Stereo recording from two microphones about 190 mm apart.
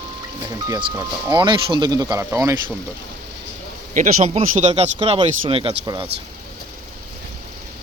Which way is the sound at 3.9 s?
40° right (ahead or behind).